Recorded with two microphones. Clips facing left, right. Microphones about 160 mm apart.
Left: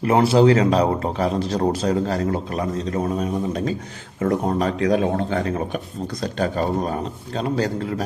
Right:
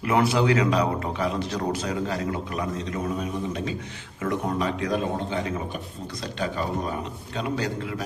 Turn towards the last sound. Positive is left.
turn(degrees=40)  # may be behind; listen again after turning